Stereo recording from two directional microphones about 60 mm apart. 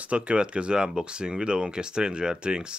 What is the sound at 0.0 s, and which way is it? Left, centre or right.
Speech, right.